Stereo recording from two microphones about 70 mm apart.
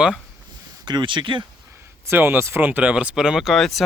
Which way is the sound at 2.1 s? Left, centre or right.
Right.